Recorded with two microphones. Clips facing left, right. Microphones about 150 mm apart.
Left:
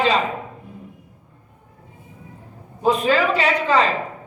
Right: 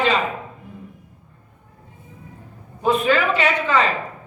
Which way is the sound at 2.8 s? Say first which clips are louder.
Left 1 dB; 35° left (ahead or behind).